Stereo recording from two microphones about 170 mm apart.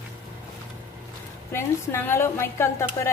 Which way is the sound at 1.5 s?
15° left (ahead or behind).